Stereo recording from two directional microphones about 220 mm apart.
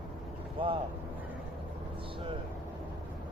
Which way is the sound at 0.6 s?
25° right (ahead or behind).